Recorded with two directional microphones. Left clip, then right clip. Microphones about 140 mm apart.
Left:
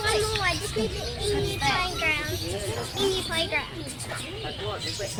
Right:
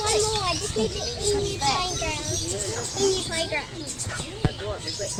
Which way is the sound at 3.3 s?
50° right (ahead or behind).